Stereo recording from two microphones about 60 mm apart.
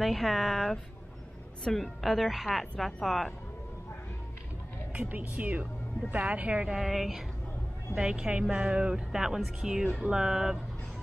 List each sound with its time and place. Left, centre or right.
0.0 s a woman's voice: centre
5.0 s speech: right
6.7 s a woman's voice: centre